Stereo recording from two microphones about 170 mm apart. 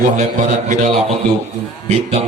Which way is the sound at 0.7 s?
45° right (ahead or behind).